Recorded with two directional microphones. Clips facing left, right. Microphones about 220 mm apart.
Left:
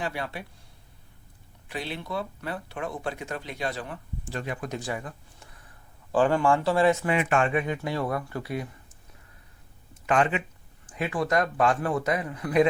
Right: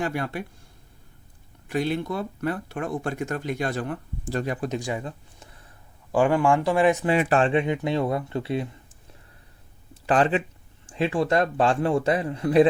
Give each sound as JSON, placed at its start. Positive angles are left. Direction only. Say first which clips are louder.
{"t": 0.0, "sound": "speech", "louder": "right 5 dB", "side_deg": -50}
{"t": 1.6, "sound": "speech", "louder": "right 9 dB", "side_deg": -45}
{"t": 4.7, "sound": "speech", "louder": "right 4 dB", "side_deg": -20}
{"t": 7.1, "sound": "speech", "louder": "right 4 dB", "side_deg": -35}
{"t": 10.1, "sound": "speech", "louder": "right 3 dB", "side_deg": -35}